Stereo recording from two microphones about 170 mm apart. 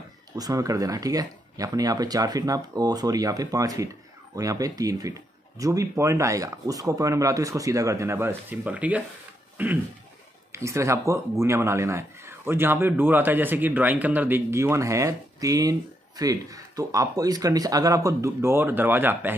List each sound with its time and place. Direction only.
0.4 s speech: 20° right (ahead or behind)